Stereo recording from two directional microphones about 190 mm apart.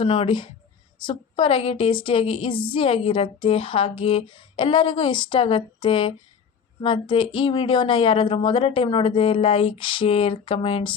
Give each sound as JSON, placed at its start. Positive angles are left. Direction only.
{"t": 0.0, "sound": "a woman's voice", "side_deg": 30}